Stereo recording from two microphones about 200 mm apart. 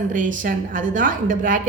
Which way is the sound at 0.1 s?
40° right (ahead or behind).